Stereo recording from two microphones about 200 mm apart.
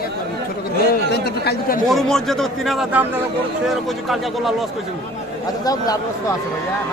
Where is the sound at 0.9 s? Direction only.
55° left (ahead or behind).